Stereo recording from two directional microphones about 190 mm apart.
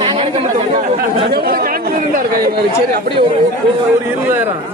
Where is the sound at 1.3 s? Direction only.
55° right (ahead or behind).